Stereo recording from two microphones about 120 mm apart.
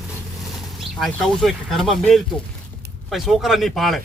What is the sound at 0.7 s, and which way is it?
Speech, centre (ahead or behind).